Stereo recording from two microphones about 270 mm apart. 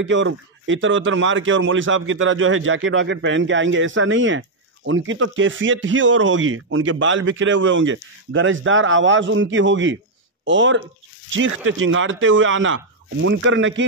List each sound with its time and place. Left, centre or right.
0.0 s a man's voice: right